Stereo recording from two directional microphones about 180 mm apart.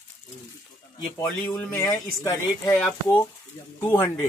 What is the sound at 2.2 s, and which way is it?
Speech, 20° left (ahead or behind).